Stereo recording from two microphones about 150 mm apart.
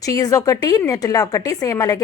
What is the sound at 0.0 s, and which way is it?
A woman's voice, 25° left (ahead or behind).